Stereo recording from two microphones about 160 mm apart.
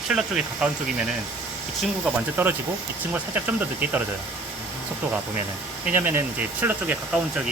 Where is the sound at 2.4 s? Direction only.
15° right (ahead or behind).